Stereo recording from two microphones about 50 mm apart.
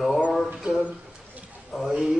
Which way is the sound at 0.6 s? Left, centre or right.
Centre.